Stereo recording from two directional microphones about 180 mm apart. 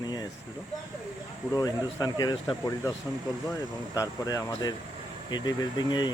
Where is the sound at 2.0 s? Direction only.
20° left (ahead or behind).